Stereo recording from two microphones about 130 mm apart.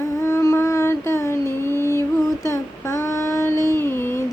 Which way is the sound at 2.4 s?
25° left (ahead or behind).